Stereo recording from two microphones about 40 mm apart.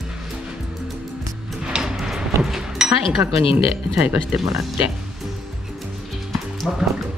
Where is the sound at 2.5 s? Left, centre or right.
Centre.